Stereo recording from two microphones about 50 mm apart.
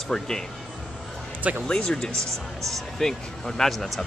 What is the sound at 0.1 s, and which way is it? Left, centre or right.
Speech, centre.